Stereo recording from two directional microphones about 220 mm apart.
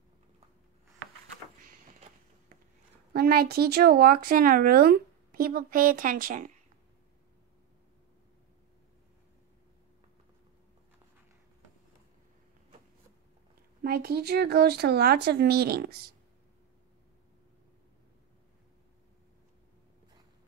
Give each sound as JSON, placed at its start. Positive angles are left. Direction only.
{"t": 1.6, "sound": "vehicle", "side_deg": -35}
{"t": 3.1, "sound": "speech", "side_deg": -45}
{"t": 13.8, "sound": "speech", "side_deg": -45}